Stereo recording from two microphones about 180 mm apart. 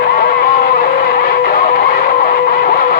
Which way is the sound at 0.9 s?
55° left (ahead or behind).